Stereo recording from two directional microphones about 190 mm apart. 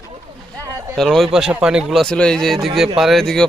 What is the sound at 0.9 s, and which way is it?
A man's voice, centre (ahead or behind).